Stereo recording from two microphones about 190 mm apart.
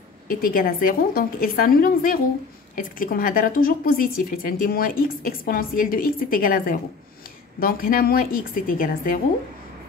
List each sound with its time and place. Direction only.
0.3 s speech: 50° left (ahead or behind)